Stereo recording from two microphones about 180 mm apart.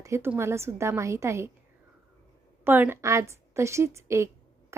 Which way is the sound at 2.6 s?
10° right (ahead or behind).